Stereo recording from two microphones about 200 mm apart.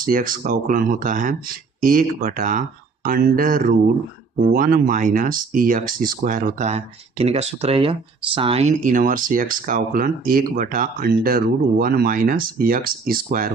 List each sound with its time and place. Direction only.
0.0 s speech: 45° right (ahead or behind)